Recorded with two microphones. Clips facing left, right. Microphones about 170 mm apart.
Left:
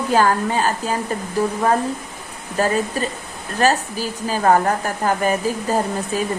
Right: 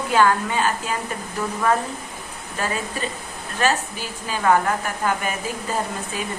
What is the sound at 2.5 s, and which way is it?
Speech, 40° left (ahead or behind).